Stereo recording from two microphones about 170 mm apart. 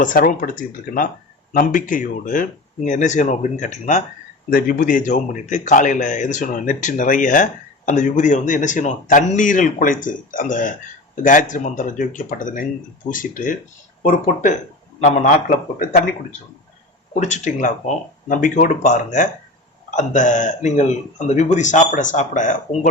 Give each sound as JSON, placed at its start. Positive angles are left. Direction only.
{"t": 0.0, "sound": "speech", "side_deg": 50}
{"t": 1.5, "sound": "a man's voice", "side_deg": 50}
{"t": 4.4, "sound": "a man's voice", "side_deg": 55}
{"t": 17.2, "sound": "a man's voice", "side_deg": 45}